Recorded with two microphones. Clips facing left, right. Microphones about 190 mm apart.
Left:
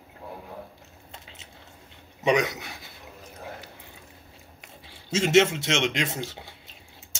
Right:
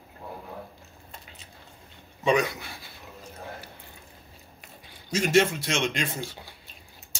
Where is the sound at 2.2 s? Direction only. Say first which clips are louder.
Left 1 dB; 20° left (ahead or behind).